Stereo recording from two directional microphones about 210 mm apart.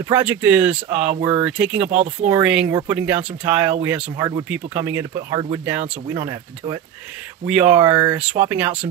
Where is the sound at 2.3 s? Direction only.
5° right (ahead or behind).